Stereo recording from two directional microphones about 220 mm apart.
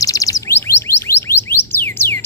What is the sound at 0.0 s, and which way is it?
Chirp tone, 15° left (ahead or behind).